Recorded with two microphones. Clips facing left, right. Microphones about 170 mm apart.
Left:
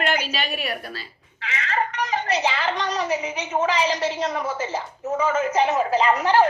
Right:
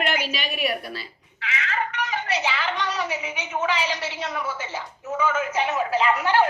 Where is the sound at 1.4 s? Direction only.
35° left (ahead or behind).